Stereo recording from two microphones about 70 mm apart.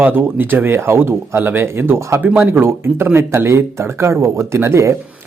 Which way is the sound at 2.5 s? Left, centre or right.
Right.